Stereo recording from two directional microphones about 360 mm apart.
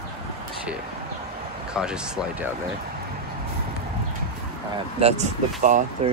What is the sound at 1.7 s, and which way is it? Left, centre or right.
Speech, centre.